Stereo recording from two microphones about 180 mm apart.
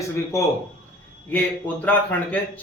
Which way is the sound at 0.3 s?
15° left (ahead or behind).